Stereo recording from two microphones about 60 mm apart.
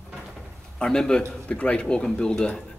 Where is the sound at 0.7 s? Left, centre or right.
Centre.